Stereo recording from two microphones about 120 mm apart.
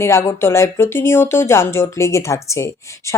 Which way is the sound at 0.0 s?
25° left (ahead or behind).